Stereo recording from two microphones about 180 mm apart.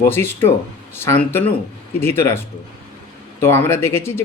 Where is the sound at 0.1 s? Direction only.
15° left (ahead or behind).